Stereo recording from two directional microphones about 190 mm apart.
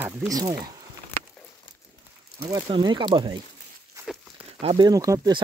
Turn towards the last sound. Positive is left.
turn(degrees=-20)  # may be behind; listen again after turning